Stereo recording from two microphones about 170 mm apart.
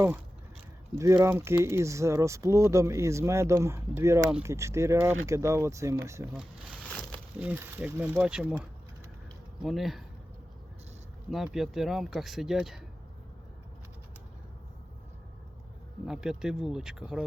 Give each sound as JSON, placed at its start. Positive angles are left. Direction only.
{"t": 0.9, "sound": "speech", "side_deg": -15}
{"t": 6.2, "sound": "speech", "side_deg": -5}
{"t": 6.8, "sound": "a sound", "side_deg": 5}
{"t": 7.3, "sound": "speech", "side_deg": -10}
{"t": 11.3, "sound": "speech", "side_deg": 0}
{"t": 16.0, "sound": "speech", "side_deg": -5}